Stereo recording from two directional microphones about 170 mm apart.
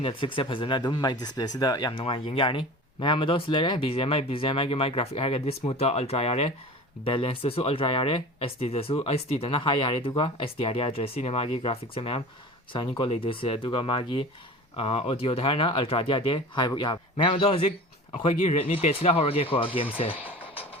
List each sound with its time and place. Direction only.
0.0 s speech: 30° left (ahead or behind)
20.1 s music: 10° right (ahead or behind)